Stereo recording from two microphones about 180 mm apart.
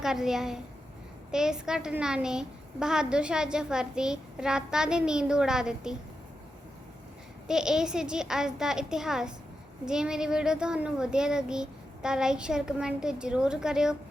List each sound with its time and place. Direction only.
0.0 s a woman's voice: centre (ahead or behind)
7.4 s a woman's voice: 5° right (ahead or behind)